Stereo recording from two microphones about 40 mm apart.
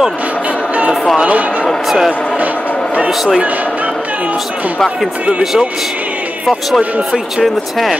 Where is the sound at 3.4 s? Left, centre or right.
Right.